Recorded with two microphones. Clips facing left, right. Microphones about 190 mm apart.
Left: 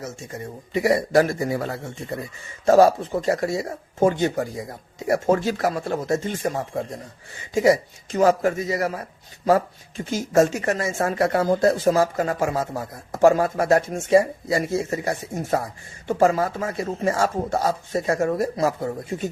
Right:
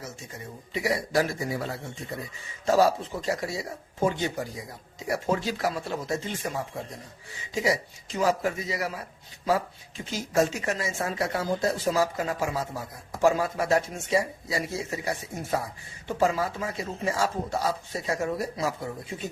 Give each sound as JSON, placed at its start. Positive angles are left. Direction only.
{"t": 0.7, "sound": "speech", "side_deg": 55}